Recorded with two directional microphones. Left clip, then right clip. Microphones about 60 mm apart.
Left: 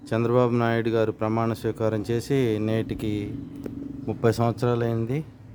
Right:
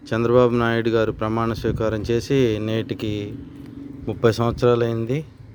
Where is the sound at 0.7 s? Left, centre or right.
Centre.